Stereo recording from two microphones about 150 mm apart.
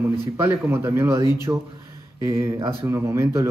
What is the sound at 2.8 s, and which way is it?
Speech, 15° right (ahead or behind).